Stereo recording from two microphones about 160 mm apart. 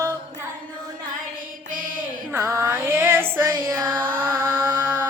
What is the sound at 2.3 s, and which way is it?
Mantra, 20° right (ahead or behind).